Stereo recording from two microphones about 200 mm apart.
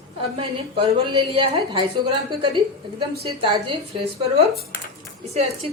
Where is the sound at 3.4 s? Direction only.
25° right (ahead or behind).